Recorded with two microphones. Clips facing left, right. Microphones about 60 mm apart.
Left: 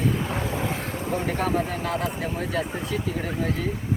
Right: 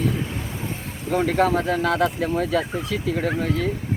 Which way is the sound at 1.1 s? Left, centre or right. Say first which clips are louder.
Right 6 dB; right.